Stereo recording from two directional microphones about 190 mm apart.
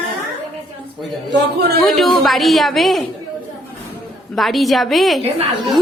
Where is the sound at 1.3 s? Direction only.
60° right (ahead or behind).